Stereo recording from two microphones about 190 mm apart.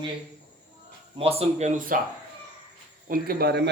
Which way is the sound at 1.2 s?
30° right (ahead or behind).